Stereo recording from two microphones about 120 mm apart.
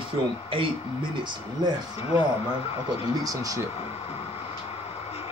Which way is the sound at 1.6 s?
35° right (ahead or behind).